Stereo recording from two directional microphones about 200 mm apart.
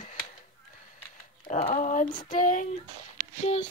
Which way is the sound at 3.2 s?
40° right (ahead or behind).